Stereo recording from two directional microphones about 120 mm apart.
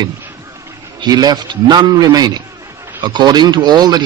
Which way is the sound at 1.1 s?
35° right (ahead or behind).